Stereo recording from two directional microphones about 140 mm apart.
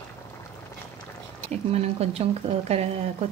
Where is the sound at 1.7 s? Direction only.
45° right (ahead or behind).